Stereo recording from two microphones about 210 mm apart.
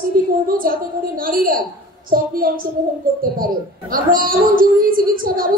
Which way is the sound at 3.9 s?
45° right (ahead or behind).